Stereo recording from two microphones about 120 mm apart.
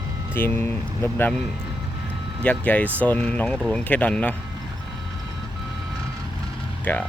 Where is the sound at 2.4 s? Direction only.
10° left (ahead or behind).